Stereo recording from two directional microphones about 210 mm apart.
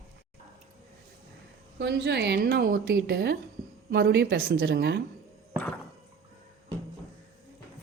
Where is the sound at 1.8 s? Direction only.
55° right (ahead or behind).